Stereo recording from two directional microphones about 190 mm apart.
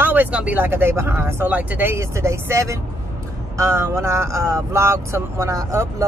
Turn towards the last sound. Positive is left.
turn(degrees=-15)  # may be behind; listen again after turning